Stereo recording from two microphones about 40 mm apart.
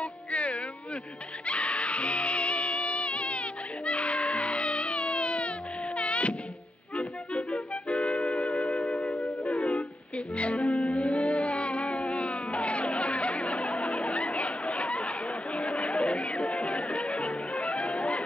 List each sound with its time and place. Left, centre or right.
0.0 s music: left